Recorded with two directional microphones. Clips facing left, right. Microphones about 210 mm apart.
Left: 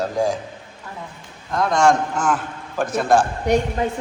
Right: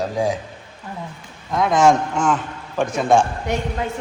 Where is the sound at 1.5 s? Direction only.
Centre (ahead or behind).